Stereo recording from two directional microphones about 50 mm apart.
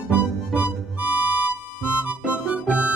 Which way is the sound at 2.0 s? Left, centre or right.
Right.